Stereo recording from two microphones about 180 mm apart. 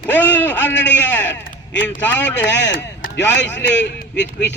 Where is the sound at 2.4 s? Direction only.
80° left.